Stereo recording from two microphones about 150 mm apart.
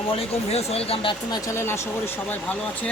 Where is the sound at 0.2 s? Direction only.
40° left (ahead or behind).